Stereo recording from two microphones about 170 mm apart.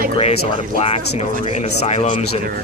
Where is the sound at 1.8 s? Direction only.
40° left (ahead or behind).